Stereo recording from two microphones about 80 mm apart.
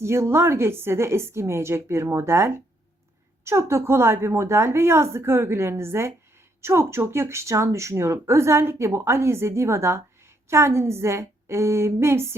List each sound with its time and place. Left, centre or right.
0.0 s speech: right